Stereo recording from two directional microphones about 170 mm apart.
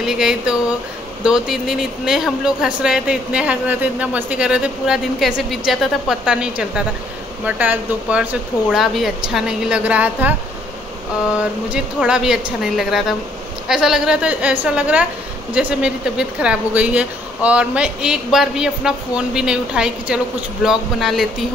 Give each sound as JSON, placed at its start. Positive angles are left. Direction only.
{"t": 0.0, "sound": "speech", "side_deg": -5}
{"t": 11.7, "sound": "speech", "side_deg": -5}